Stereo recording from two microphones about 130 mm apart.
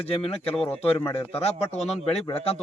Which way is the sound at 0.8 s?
50° left (ahead or behind).